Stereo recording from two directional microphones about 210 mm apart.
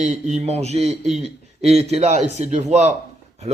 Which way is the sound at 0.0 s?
35° right (ahead or behind).